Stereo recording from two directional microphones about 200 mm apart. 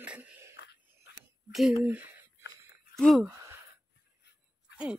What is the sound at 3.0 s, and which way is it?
Speech, centre (ahead or behind).